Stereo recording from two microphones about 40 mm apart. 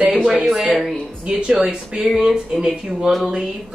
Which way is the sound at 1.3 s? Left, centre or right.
Right.